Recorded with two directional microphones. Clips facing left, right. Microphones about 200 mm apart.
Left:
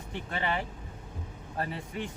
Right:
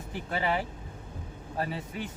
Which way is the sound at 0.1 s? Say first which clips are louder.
Right 2 dB; 5° right (ahead or behind).